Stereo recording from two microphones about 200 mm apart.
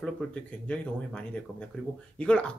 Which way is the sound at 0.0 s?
5° left (ahead or behind).